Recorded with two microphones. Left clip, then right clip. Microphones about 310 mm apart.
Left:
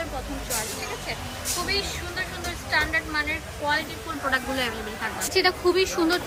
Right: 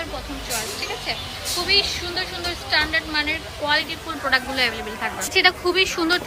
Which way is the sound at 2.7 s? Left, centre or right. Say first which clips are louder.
Right 3 dB; centre.